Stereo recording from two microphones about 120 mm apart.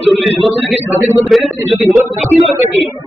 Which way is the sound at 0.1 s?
Centre (ahead or behind).